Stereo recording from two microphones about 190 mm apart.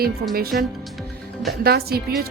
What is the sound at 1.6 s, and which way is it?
Speech, 55° right (ahead or behind).